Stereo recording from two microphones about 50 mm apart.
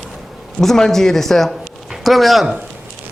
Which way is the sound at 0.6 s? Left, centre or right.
Centre.